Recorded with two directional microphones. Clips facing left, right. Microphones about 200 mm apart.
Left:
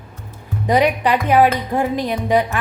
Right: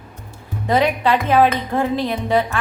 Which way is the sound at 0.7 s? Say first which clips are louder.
Left 1 dB; 15° left (ahead or behind).